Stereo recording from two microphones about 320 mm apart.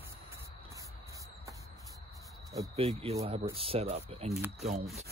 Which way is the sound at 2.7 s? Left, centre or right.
Centre.